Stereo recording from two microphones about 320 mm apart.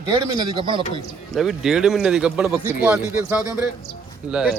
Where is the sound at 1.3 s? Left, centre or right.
Centre.